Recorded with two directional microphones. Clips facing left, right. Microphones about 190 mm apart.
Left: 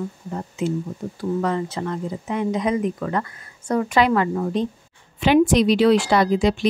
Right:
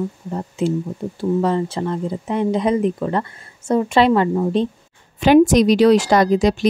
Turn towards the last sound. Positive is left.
turn(degrees=-40)  # may be behind; listen again after turning